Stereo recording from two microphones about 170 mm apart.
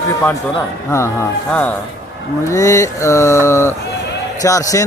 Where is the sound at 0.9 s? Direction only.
15° left (ahead or behind).